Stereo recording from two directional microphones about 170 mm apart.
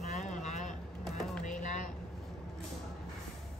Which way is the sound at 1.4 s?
50° left (ahead or behind).